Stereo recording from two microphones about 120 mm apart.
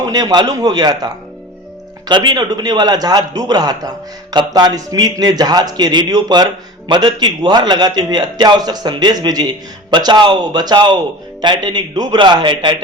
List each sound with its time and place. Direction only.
0.0 s a man's voice: 35° right (ahead or behind)